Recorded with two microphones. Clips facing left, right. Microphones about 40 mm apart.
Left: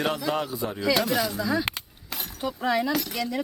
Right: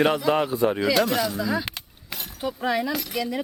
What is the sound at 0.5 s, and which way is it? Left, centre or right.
Speech, right.